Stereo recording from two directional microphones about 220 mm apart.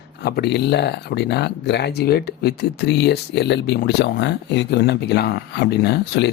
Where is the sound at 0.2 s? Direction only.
45° left (ahead or behind).